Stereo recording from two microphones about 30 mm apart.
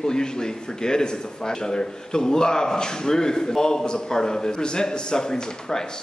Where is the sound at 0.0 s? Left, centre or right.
Left.